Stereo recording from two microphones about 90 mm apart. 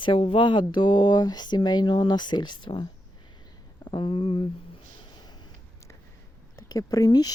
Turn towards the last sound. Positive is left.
turn(degrees=45)  # may be behind; listen again after turning